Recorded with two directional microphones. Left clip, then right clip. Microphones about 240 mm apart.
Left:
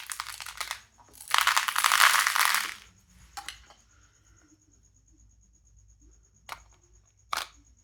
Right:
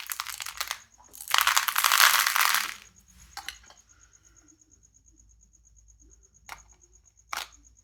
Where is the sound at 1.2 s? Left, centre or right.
Centre.